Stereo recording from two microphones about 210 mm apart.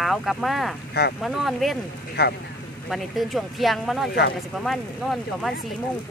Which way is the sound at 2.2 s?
50° left (ahead or behind).